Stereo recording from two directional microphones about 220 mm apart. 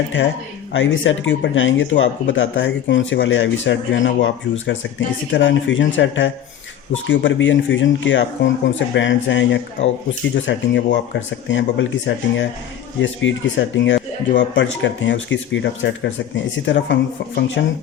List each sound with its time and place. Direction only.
0.7 s speech: 60° left (ahead or behind)